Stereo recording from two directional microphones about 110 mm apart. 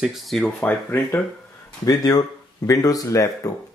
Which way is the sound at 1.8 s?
35° left (ahead or behind).